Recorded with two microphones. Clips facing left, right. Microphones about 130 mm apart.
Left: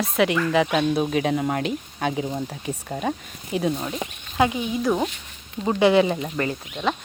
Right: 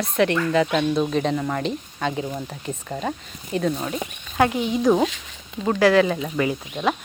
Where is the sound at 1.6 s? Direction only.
5° left (ahead or behind).